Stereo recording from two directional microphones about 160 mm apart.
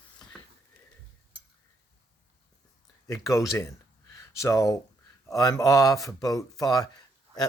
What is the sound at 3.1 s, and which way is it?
Speech, 20° left (ahead or behind).